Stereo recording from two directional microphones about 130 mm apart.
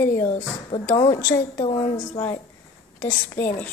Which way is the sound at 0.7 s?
50° left (ahead or behind).